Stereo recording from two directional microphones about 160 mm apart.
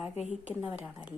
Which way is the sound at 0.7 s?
5° right (ahead or behind).